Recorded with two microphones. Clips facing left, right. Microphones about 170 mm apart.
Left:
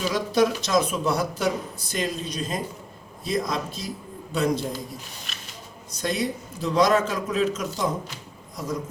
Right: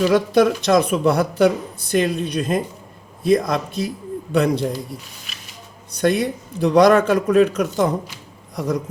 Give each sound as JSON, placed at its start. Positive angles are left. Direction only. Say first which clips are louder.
{"t": 0.0, "sound": "speech", "louder": "right 7 dB", "side_deg": -60}
{"t": 5.9, "sound": "speech", "louder": "right 8 dB", "side_deg": -60}